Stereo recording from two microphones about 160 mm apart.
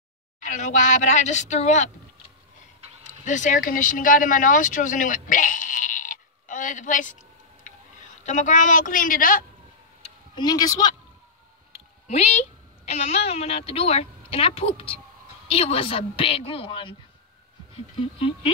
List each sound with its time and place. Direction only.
0.4 s speech: 50° left (ahead or behind)
3.0 s speech: 50° left (ahead or behind)
8.2 s a woman's voice: 50° left (ahead or behind)
10.3 s speech: 25° left (ahead or behind)
11.7 s a woman's voice: 40° left (ahead or behind)
17.9 s a woman's voice: 35° left (ahead or behind)